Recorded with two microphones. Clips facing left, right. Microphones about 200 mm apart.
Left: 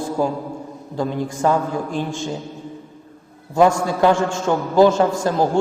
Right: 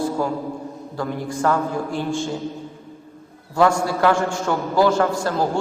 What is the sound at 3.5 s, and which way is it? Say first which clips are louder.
A man's voice: left 2 dB; 20° left (ahead or behind).